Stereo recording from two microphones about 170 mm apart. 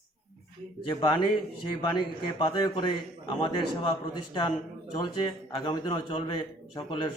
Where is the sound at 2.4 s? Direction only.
25° left (ahead or behind).